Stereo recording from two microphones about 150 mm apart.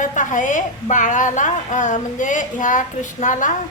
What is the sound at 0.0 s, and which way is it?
Speech, 55° left (ahead or behind).